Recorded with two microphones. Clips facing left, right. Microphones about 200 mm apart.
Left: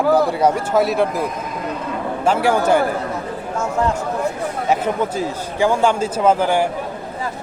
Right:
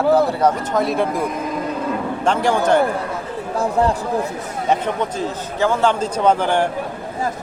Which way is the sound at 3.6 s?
35° right (ahead or behind).